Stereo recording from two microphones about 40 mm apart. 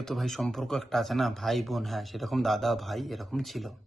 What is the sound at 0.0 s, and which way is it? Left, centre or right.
A man's voice, centre.